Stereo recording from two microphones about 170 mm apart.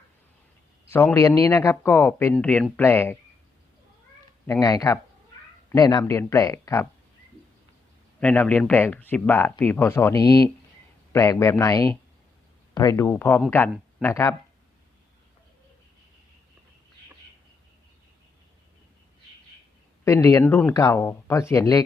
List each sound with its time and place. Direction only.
0.9 s speech: 15° left (ahead or behind)
4.4 s speech: 20° left (ahead or behind)
8.2 s speech: 10° left (ahead or behind)
20.1 s speech: 15° left (ahead or behind)